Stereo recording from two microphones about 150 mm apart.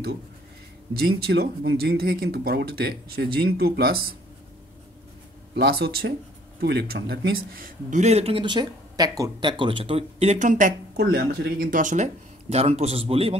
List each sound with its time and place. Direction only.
0.9 s speech: 90° right
5.6 s speech: 90° right
7.9 s speech: 45° right (ahead or behind)
11.0 s speech: 90° right; by 13.4 s 40° right (ahead or behind)